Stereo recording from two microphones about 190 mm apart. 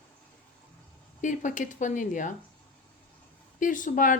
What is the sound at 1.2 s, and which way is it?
Speech, 40° left (ahead or behind).